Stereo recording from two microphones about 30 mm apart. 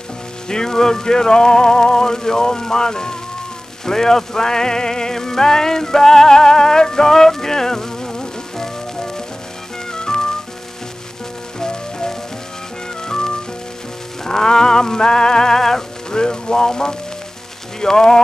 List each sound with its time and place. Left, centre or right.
0.5 s music: left
11.6 s music: left
16.2 s music: left
17.7 s speech: centre